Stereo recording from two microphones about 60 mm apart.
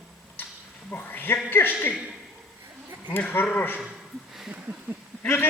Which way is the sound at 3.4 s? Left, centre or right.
Left.